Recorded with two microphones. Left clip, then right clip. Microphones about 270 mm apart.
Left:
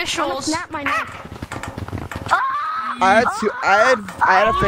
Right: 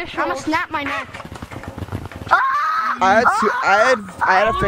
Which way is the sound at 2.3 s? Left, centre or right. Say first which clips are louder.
Right 3 dB; centre.